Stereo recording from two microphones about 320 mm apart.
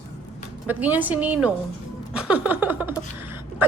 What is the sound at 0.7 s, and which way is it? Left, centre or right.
A woman's voice, centre.